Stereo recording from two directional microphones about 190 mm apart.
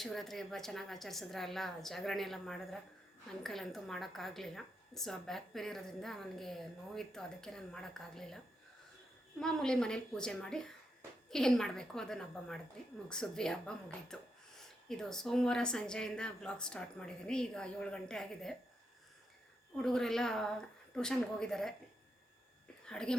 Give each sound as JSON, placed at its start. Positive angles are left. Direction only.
{"t": 0.0, "sound": "speech", "side_deg": 0}
{"t": 9.4, "sound": "speech", "side_deg": 5}
{"t": 19.7, "sound": "speech", "side_deg": 5}
{"t": 22.9, "sound": "speech", "side_deg": 5}